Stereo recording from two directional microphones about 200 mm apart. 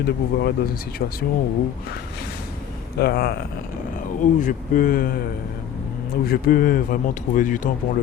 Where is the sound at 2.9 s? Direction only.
50° left (ahead or behind).